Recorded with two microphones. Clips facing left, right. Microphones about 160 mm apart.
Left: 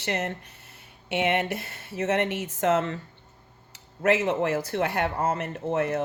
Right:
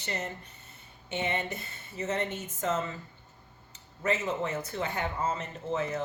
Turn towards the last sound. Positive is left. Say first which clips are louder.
# left 6 dB
turn(degrees=70)  # may be behind; listen again after turning